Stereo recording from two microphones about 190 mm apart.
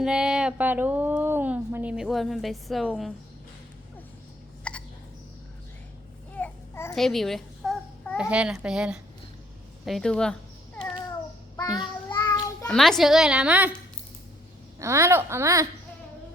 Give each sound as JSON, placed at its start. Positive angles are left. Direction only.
{"t": 0.0, "sound": "speech", "side_deg": -5}
{"t": 4.7, "sound": "hiccup", "side_deg": 5}
{"t": 6.3, "sound": "babbling", "side_deg": 10}
{"t": 6.9, "sound": "a child's voice", "side_deg": 0}
{"t": 11.5, "sound": "child singing", "side_deg": 20}
{"t": 12.6, "sound": "speech", "side_deg": 0}
{"t": 14.8, "sound": "speech", "side_deg": -15}